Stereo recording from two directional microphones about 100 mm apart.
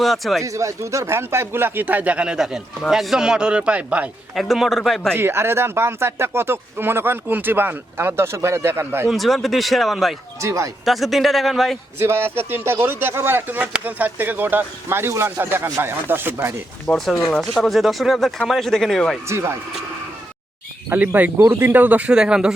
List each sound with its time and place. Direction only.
0.0 s speech: centre (ahead or behind)
0.4 s speech: 35° right (ahead or behind); by 4.1 s 15° right (ahead or behind)
4.4 s speech: centre (ahead or behind)
5.1 s speech: 25° right (ahead or behind)
9.0 s speech: centre (ahead or behind)
10.4 s speech: 30° right (ahead or behind)
10.8 s speech: centre (ahead or behind)
11.9 s speech: 25° right (ahead or behind)
16.9 s speech: 5° left (ahead or behind)
19.3 s speech: 25° right (ahead or behind)
20.9 s speech: 15° right (ahead or behind)